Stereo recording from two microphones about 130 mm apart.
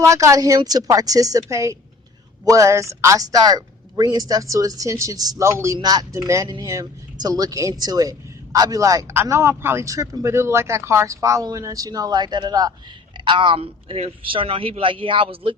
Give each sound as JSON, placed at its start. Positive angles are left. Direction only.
{"t": 0.0, "sound": "a man's voice", "side_deg": -25}